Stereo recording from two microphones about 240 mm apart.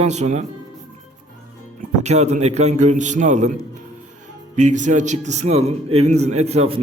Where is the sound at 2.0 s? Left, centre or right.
Right.